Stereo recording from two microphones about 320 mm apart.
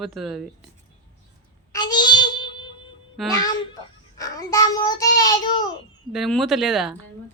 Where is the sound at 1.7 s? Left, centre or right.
Centre.